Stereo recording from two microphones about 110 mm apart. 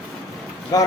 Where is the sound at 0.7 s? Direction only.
35° left (ahead or behind).